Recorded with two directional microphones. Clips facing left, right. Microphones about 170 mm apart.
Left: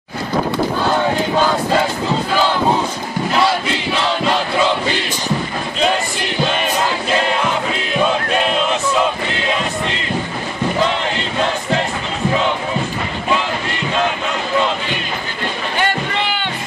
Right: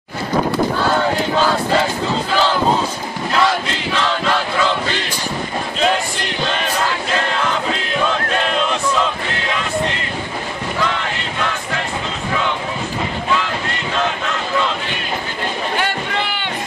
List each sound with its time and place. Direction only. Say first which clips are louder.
3.3 s battle cry: even; 10° left (ahead or behind)
6.5 s battle cry: left 2 dB; 15° left (ahead or behind)
8.0 s a sound: left 4 dB; 10° left (ahead or behind)
10.8 s crowd: left 2 dB; 25° left (ahead or behind)